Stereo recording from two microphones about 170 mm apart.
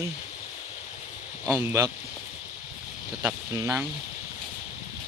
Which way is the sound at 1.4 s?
15° right (ahead or behind).